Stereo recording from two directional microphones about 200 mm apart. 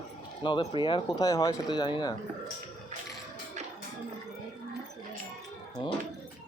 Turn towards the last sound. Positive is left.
turn(degrees=25)  # may be behind; listen again after turning